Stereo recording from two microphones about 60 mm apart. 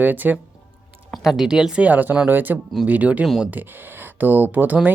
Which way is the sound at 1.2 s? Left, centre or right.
Centre.